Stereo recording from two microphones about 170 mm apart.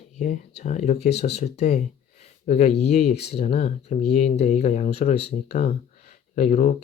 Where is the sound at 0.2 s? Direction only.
45° left (ahead or behind).